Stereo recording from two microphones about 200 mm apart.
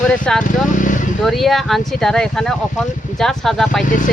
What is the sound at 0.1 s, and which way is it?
Speech, 5° left (ahead or behind).